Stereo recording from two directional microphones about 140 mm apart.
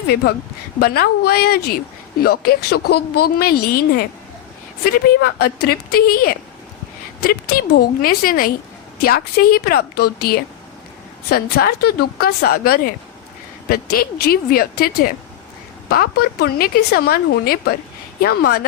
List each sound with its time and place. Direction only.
0.8 s a woman's voice: 90° left
5.4 s a woman's voice: 90° left